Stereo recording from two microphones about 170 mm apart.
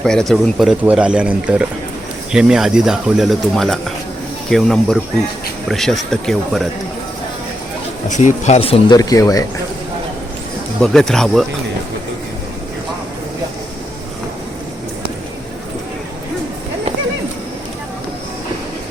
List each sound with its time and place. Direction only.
0.0 s speech: 5° left (ahead or behind)
8.1 s speech: 45° left (ahead or behind)
9.0 s speech: 20° left (ahead or behind)
10.8 s speech: 5° left (ahead or behind)